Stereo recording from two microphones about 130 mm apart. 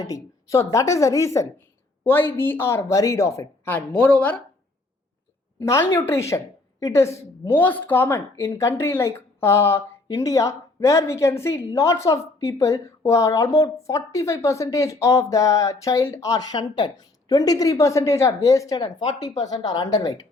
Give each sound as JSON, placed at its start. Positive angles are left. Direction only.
{"t": 0.0, "sound": "a woman's voice", "side_deg": 25}
{"t": 5.5, "sound": "a woman's voice", "side_deg": 20}